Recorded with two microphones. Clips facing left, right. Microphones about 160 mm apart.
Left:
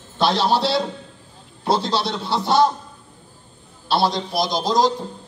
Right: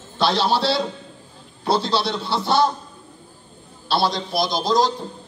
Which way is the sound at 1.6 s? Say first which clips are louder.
Even; 20° left (ahead or behind).